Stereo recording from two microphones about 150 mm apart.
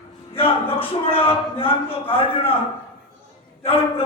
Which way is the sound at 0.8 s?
40° left (ahead or behind).